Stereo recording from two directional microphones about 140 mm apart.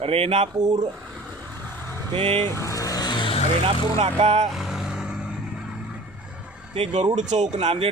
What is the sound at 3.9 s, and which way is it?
Speech, 50° right (ahead or behind).